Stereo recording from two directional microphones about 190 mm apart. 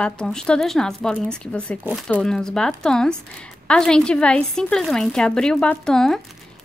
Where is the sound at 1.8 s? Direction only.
5° right (ahead or behind).